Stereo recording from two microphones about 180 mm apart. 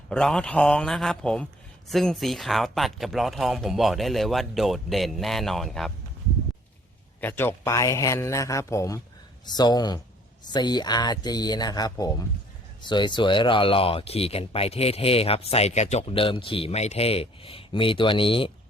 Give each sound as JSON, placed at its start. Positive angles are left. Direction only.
{"t": 0.1, "sound": "speech", "side_deg": 5}
{"t": 7.2, "sound": "a man's voice", "side_deg": 10}